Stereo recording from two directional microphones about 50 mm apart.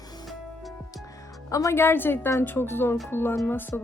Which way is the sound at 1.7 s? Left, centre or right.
Left.